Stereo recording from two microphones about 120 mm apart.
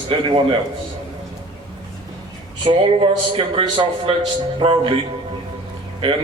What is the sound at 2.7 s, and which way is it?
A man's voice, 45° right (ahead or behind).